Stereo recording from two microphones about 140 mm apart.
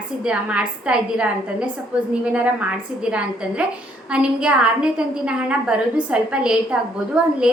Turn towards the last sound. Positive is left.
turn(degrees=-10)  # may be behind; listen again after turning